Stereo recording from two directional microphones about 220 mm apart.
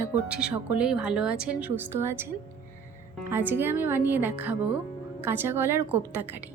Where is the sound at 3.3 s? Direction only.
10° right (ahead or behind).